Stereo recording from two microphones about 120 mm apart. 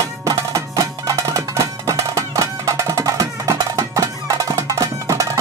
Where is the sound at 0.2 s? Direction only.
25° right (ahead or behind).